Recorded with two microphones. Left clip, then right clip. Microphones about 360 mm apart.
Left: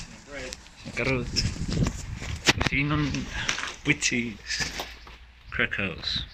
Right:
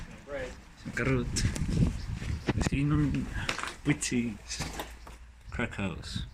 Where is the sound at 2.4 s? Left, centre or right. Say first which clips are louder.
Left 11 dB; left.